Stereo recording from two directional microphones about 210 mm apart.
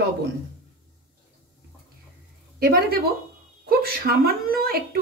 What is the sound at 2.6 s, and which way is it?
Speech, 45° right (ahead or behind).